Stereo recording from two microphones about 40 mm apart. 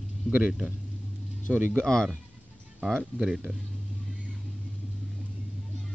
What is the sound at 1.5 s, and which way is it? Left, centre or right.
Speech, right.